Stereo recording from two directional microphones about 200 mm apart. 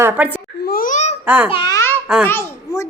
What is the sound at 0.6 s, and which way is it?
Speech, 50° left (ahead or behind).